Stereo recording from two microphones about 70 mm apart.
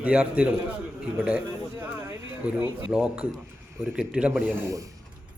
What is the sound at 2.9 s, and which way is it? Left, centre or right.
A man's voice, centre.